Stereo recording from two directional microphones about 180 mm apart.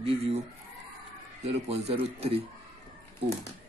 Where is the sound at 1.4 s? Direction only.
35° right (ahead or behind).